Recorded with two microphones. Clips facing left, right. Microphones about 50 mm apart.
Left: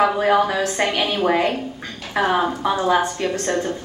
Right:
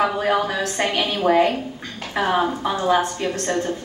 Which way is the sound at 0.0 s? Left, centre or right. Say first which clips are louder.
Left 3 dB; centre.